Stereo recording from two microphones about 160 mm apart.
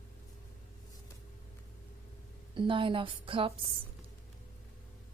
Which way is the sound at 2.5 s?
30° right (ahead or behind).